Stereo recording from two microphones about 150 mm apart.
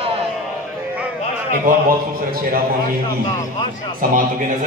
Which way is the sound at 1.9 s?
75° right (ahead or behind).